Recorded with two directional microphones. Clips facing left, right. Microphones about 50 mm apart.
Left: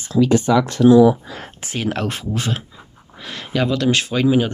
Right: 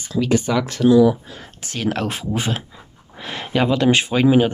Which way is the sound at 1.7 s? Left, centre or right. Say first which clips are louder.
Even; centre.